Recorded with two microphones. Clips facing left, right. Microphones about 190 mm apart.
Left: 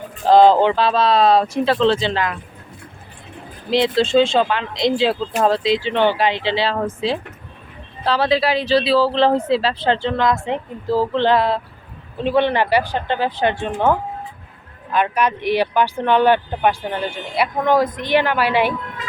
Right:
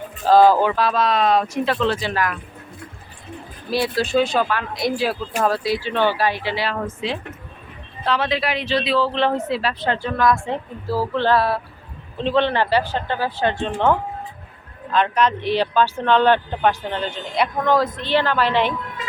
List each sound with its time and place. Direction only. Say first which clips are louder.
0.3 s speech: left 2 dB; 20° left (ahead or behind)
3.7 s speech: left 4 dB; 20° left (ahead or behind)
14.9 s speech: even; 10° left (ahead or behind)